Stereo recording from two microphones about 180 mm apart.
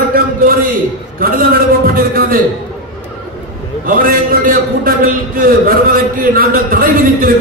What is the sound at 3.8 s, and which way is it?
A man's voice, 50° right (ahead or behind).